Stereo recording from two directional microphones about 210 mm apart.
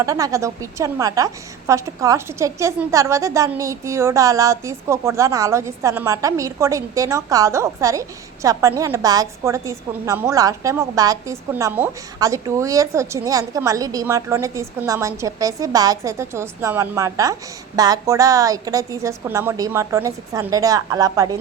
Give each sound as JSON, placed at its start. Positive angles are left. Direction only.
{"t": 0.0, "sound": "a woman's voice", "side_deg": -15}